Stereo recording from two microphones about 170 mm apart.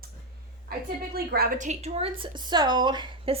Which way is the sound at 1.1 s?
65° right (ahead or behind).